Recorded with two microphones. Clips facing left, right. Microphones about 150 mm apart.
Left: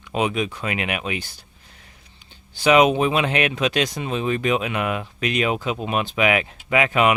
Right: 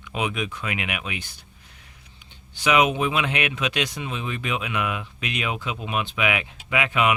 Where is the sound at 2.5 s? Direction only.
35° left (ahead or behind).